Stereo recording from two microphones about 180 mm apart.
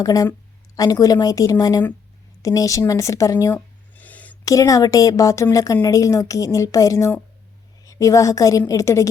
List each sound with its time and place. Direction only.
0.0 s a woman's voice: 20° left (ahead or behind)